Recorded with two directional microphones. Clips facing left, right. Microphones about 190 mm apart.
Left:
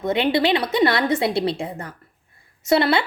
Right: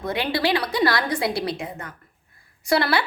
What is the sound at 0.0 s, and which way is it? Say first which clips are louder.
A woman's voice: left 4 dB; 20° left (ahead or behind).